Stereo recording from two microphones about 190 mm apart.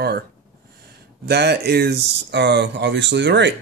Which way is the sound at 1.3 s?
60° right (ahead or behind).